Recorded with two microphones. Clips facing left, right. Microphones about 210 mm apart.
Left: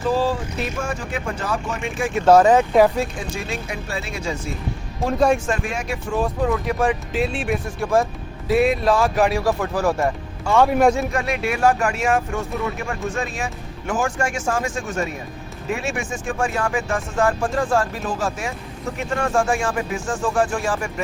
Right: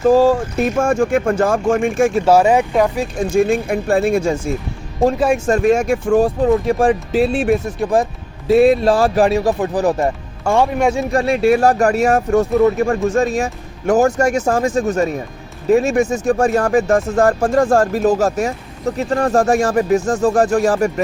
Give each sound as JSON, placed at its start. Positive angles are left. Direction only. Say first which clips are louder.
{"t": 0.0, "sound": "speech", "louder": "right 9 dB", "side_deg": -45}
{"t": 2.2, "sound": "speech", "louder": "left 2 dB", "side_deg": -10}
{"t": 3.2, "sound": "speech", "louder": "right 13 dB", "side_deg": -50}
{"t": 5.5, "sound": "speech", "louder": "right 11 dB", "side_deg": -45}
{"t": 6.2, "sound": "speech", "louder": "right 7 dB", "side_deg": -30}
{"t": 7.8, "sound": "speech", "louder": "right 3 dB", "side_deg": -20}
{"t": 8.4, "sound": "speech", "louder": "right 6 dB", "side_deg": -30}
{"t": 10.5, "sound": "speech", "louder": "right 3 dB", "side_deg": -50}
{"t": 11.1, "sound": "speech", "louder": "right 10 dB", "side_deg": -35}